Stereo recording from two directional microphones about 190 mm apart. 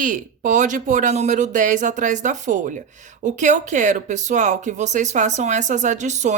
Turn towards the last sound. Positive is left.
turn(degrees=-40)  # may be behind; listen again after turning